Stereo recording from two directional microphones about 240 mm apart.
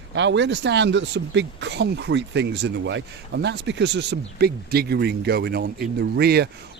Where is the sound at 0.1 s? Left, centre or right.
Right.